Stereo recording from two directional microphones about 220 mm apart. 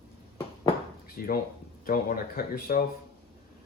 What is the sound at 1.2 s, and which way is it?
Speech, 40° left (ahead or behind).